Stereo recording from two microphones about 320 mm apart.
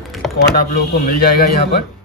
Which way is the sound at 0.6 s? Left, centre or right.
Left.